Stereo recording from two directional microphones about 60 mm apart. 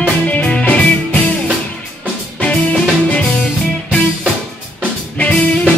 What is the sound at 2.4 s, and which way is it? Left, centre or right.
Music, centre.